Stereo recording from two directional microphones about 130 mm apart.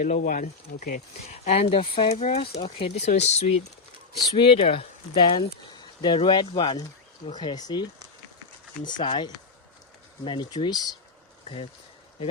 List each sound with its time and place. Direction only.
0.0 s speech: 90° left
1.2 s speech: 50° left (ahead or behind)
4.4 s speech: 45° left (ahead or behind)